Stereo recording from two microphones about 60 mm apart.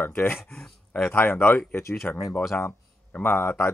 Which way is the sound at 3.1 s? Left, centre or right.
Left.